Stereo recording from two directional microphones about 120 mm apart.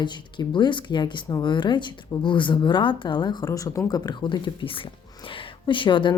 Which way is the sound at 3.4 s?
30° left (ahead or behind).